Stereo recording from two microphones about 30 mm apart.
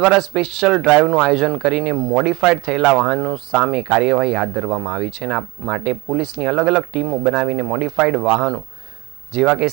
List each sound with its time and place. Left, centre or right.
0.0 s speech: centre